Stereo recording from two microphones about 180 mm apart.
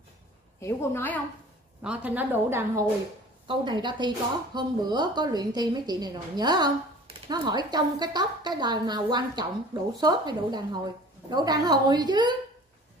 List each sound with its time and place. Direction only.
0.6 s a woman's voice: 15° left (ahead or behind)
1.8 s a woman's voice: 5° right (ahead or behind)
3.4 s a woman's voice: 25° right (ahead or behind)